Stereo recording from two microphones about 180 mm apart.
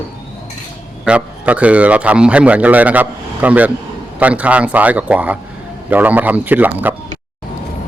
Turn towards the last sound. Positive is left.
turn(degrees=-10)  # may be behind; listen again after turning